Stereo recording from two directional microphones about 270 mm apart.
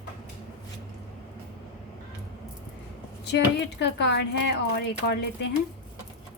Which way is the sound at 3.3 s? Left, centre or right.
Left.